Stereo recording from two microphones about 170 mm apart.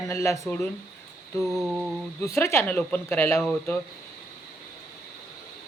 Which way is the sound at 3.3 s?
Centre (ahead or behind).